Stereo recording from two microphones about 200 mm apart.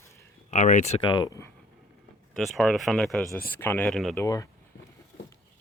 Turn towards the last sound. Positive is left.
turn(degrees=15)  # may be behind; listen again after turning